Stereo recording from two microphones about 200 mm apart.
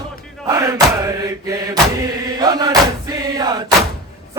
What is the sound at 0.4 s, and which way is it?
Chant, 15° right (ahead or behind).